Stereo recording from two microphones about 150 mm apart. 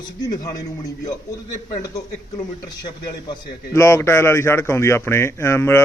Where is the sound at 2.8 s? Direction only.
30° left (ahead or behind).